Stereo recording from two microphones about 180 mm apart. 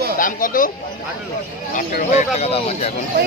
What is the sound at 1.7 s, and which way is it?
Speech, 45° left (ahead or behind).